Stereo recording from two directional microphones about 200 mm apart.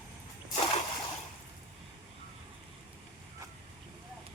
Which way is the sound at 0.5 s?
30° left (ahead or behind).